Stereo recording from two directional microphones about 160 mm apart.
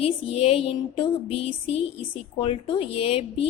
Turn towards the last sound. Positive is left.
turn(degrees=35)  # may be behind; listen again after turning